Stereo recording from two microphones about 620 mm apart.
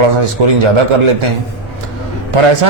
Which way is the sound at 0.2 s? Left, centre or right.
Right.